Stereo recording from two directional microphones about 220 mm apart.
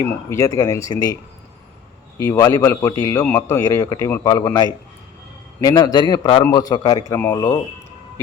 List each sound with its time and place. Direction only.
0.0 s a man's voice: 15° left (ahead or behind)